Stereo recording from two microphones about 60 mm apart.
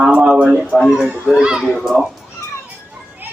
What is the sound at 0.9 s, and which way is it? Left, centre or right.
Speech, centre.